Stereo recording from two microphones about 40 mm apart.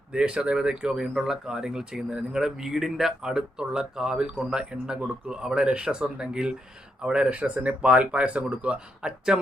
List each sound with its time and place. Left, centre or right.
0.1 s speech: right
1.1 s speech: centre
1.5 s speech: centre
7.3 s speech: right
9.0 s speech: centre